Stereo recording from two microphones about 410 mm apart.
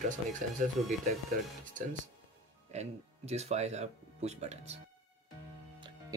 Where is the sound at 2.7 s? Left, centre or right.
Centre.